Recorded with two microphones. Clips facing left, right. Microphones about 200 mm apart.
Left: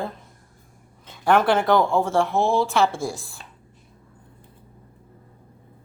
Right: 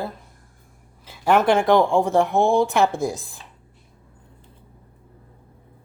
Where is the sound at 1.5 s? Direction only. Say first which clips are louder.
Right 2 dB; 15° right (ahead or behind).